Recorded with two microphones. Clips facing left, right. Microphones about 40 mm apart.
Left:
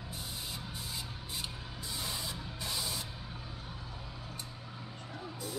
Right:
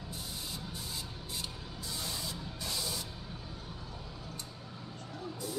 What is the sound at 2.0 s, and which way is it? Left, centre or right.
Spray, centre.